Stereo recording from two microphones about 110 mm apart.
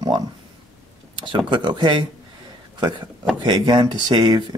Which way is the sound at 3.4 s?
45° right (ahead or behind).